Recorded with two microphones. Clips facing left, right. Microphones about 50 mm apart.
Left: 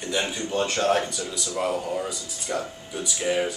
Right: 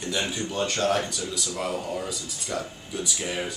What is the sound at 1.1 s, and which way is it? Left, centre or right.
Speech, centre.